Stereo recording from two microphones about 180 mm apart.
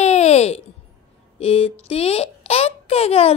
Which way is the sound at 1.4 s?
35° left (ahead or behind).